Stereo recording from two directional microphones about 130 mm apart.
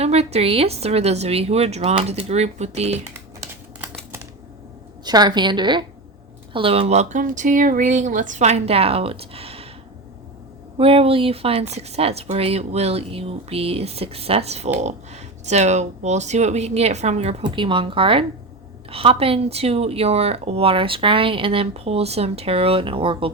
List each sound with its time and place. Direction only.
0.0 s speech: 55° right (ahead or behind)
5.0 s speech: 30° right (ahead or behind); by 9.6 s 50° right (ahead or behind)
10.8 s a woman's voice: 45° right (ahead or behind)
17.4 s a woman's voice: 40° right (ahead or behind)